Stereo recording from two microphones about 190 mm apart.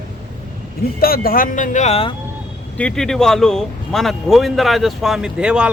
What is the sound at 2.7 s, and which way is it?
Speech, 5° left (ahead or behind).